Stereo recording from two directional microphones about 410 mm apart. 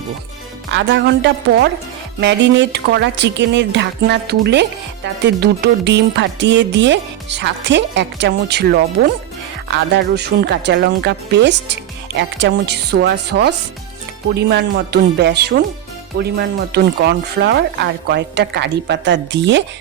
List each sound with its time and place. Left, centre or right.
0.7 s speech: right